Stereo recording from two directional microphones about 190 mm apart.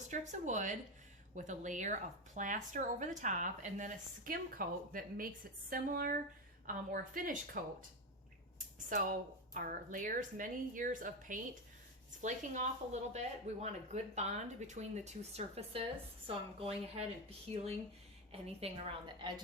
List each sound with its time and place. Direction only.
0.1 s speech: 40° right (ahead or behind)
8.5 s a sound: 45° right (ahead or behind)
9.6 s speech: 45° right (ahead or behind); by 16.7 s 30° right (ahead or behind)
18.3 s speech: 30° right (ahead or behind)